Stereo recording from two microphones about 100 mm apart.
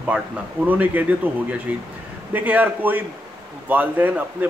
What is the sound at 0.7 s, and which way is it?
Speech, 15° right (ahead or behind).